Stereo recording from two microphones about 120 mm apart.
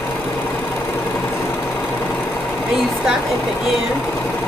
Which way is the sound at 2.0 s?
15° left (ahead or behind).